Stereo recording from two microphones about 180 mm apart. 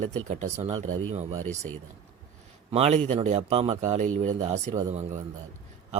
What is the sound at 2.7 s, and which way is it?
Speech, 35° right (ahead or behind).